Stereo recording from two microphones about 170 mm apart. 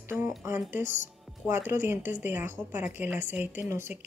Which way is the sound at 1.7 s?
15° right (ahead or behind).